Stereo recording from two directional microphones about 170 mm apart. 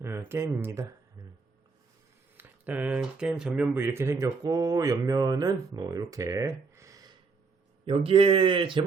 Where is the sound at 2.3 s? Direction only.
10° right (ahead or behind).